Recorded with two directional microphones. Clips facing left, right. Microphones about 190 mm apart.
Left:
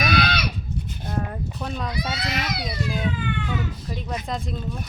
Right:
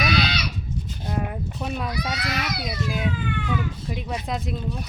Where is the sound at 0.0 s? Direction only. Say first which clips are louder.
Left 1 dB; 55° left (ahead or behind).